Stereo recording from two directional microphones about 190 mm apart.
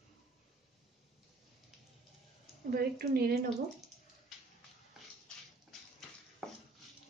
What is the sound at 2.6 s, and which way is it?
Speech, 55° right (ahead or behind).